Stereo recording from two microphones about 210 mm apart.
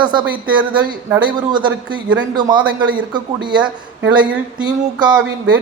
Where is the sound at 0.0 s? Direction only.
20° right (ahead or behind).